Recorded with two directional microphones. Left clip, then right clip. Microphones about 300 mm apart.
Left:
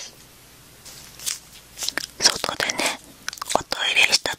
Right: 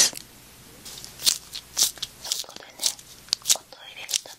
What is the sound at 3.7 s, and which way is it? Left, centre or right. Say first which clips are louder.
Whispering: left 14 dB; left.